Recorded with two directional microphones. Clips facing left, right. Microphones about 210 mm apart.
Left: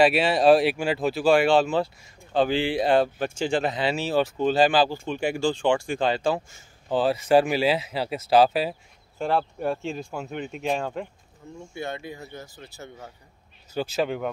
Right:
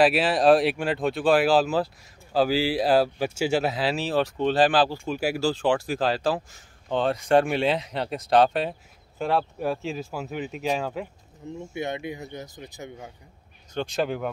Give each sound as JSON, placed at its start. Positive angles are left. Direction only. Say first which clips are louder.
{"t": 0.0, "sound": "speech", "louder": "left 1 dB", "side_deg": 0}
{"t": 11.4, "sound": "speech", "louder": "right 3 dB", "side_deg": -20}
{"t": 13.7, "sound": "speech", "louder": "left 1 dB", "side_deg": 0}